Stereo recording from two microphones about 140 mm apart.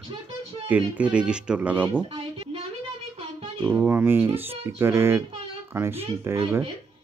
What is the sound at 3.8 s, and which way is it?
A child's voice, 15° right (ahead or behind).